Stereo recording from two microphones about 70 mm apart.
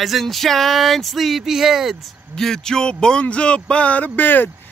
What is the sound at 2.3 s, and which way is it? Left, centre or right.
Speech, centre.